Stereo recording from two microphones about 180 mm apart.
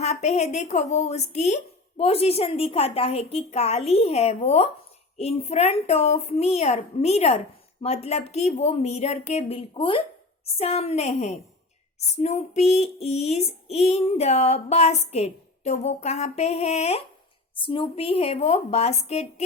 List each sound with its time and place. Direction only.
0.0 s speech: 40° left (ahead or behind)